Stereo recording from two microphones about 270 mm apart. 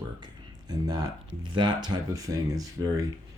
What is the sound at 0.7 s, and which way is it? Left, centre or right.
Speech, centre.